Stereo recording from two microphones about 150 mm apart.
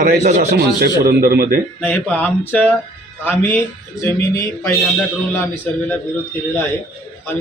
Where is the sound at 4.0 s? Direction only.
20° left (ahead or behind).